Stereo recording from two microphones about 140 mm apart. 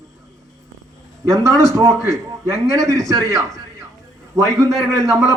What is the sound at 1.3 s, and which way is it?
A man's voice, 25° right (ahead or behind).